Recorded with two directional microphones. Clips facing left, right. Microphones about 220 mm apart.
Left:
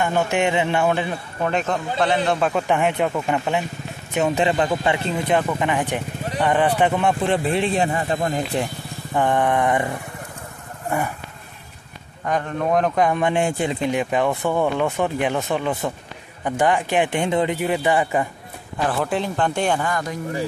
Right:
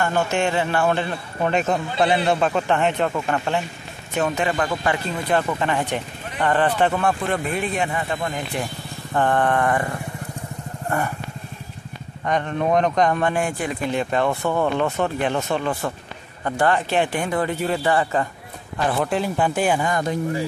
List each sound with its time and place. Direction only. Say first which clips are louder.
0.0 s speech: left 1 dB; 15° left (ahead or behind)
1.4 s a man's voice: right 2 dB; 5° right (ahead or behind)
2.7 s speech: even; 10° left (ahead or behind)
4.4 s speech: left 3 dB; 25° left (ahead or behind)
5.4 s speech: left 1 dB; 10° left (ahead or behind); by 8.6 s 35° left (ahead or behind)
9.1 s speech: even; 10° left (ahead or behind)
10.9 s speech: left 1 dB; 10° left (ahead or behind)
12.3 s speech: right 1 dB; 5° left (ahead or behind)
13.3 s speech: left 3 dB; 25° left (ahead or behind)
18.9 s speech: right 1 dB; centre (ahead or behind)
19.9 s speech: right 3 dB; 25° right (ahead or behind)